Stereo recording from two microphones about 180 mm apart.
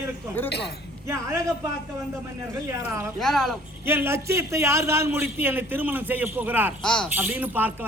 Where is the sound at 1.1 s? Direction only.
15° right (ahead or behind).